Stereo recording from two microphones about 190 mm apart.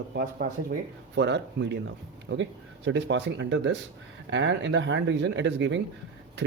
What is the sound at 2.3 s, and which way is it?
Speech, 80° right.